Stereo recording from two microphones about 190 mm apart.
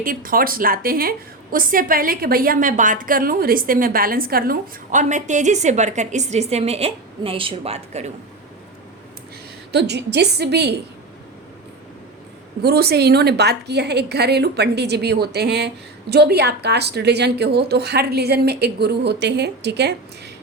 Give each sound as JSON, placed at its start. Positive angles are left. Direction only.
{"t": 0.0, "sound": "a woman's voice", "side_deg": -45}
{"t": 9.7, "sound": "a woman's voice", "side_deg": -60}
{"t": 12.6, "sound": "a woman's voice", "side_deg": -55}